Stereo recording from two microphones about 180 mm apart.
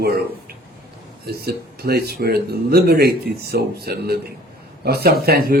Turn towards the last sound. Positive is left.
turn(degrees=-60)  # may be behind; listen again after turning